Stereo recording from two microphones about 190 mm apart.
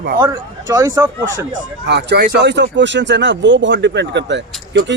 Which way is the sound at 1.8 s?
60° right (ahead or behind).